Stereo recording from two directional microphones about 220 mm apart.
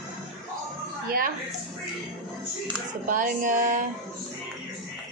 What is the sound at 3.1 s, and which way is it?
Speech, 35° right (ahead or behind).